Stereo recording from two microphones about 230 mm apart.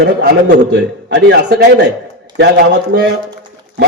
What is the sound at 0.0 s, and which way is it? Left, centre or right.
A man's voice, right.